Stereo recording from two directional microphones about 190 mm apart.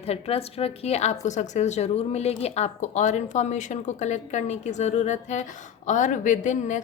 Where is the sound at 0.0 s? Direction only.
30° left (ahead or behind).